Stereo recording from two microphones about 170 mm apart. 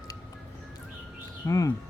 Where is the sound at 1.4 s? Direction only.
20° left (ahead or behind).